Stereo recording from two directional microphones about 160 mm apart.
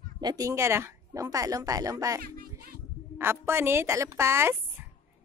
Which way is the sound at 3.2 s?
15° right (ahead or behind).